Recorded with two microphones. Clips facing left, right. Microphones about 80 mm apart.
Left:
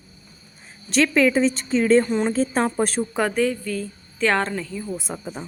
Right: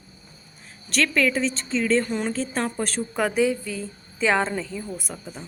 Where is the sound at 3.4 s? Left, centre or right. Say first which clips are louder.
Even; centre.